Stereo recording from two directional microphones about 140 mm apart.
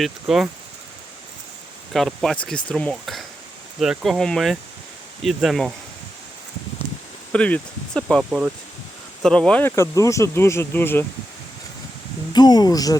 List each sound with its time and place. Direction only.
0.0 s speech: centre (ahead or behind)
1.9 s speech: centre (ahead or behind)
7.3 s speech: 10° left (ahead or behind)
8.0 s speech: 5° right (ahead or behind)
9.2 s speech: 5° left (ahead or behind)
12.3 s speech: 30° left (ahead or behind)